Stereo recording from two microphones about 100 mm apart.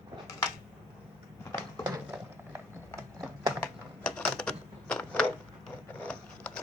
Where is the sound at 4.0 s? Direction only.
10° left (ahead or behind).